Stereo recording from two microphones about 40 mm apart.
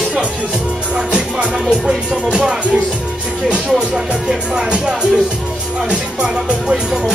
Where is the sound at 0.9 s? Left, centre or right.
Right.